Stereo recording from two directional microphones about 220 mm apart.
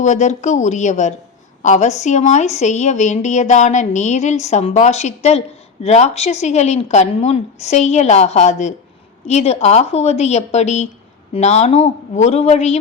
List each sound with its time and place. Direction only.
0.0 s a woman's voice: 30° left (ahead or behind)